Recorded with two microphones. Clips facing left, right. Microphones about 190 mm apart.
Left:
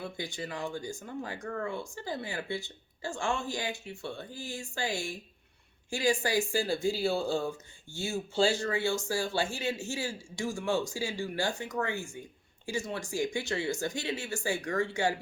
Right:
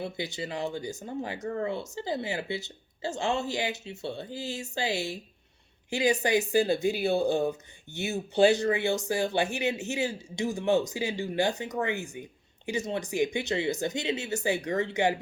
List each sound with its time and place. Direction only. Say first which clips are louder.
0.3 s speech: right 3 dB; 20° right (ahead or behind)